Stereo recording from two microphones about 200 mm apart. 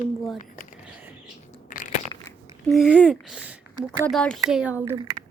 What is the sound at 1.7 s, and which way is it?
Crushing, 40° left (ahead or behind).